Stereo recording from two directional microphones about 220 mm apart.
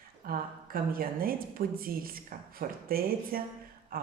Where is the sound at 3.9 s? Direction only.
40° right (ahead or behind).